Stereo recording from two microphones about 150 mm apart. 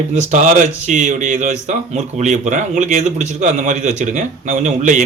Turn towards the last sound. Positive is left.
turn(degrees=-55)  # may be behind; listen again after turning